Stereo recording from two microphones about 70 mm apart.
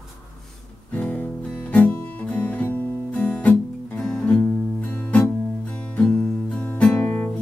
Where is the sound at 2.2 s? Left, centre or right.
Centre.